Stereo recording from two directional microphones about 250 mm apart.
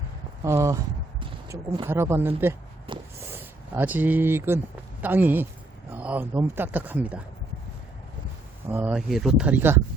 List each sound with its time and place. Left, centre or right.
0.4 s speech: centre
1.2 s a sound: centre
1.9 s speech: centre
2.9 s a sound: right
3.3 s speech: centre
8.7 s speech: centre